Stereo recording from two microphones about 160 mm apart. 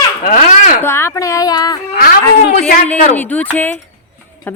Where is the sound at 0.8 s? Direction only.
15° left (ahead or behind).